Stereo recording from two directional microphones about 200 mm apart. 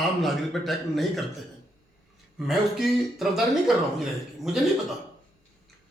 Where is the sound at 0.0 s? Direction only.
Centre (ahead or behind).